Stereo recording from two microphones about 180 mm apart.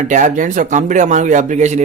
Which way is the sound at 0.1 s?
45° right (ahead or behind).